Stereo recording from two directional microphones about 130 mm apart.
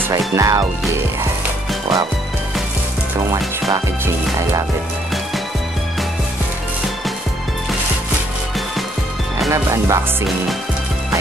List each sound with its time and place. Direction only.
0.4 s speech: 25° right (ahead or behind)
4.0 s speech: 25° right (ahead or behind)
9.5 s speech: 20° right (ahead or behind)